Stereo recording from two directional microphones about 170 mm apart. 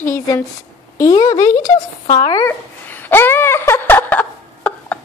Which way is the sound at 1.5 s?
45° left (ahead or behind).